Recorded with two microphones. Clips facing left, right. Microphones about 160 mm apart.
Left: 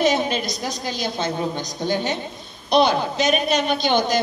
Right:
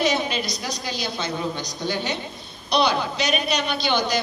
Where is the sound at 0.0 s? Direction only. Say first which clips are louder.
Left 3 dB; 50° left (ahead or behind).